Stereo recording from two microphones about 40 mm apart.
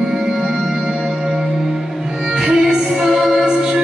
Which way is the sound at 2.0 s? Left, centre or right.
Right.